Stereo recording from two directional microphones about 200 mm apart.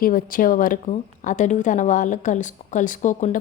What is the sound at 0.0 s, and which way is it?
Speech, 45° left (ahead or behind).